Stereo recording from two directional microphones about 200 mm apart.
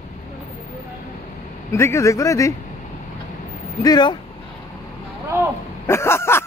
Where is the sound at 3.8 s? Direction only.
20° left (ahead or behind).